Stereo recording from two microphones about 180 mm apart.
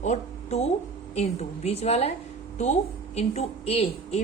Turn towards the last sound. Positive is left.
turn(degrees=35)  # may be behind; listen again after turning